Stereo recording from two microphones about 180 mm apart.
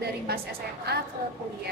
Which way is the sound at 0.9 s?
60° right (ahead or behind).